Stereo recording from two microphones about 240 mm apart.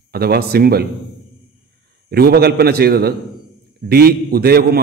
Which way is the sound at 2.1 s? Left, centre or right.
Right.